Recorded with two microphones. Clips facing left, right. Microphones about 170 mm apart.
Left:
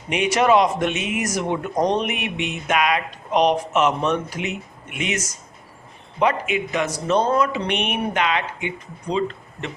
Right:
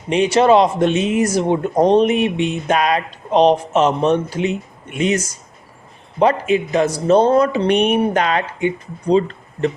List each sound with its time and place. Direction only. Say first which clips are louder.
0.1 s speech: right 5 dB; 30° right (ahead or behind)